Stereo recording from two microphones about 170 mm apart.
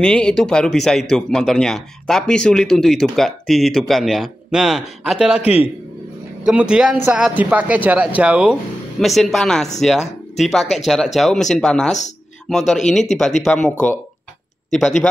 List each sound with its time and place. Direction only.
0.0 s a man's voice: 5° left (ahead or behind)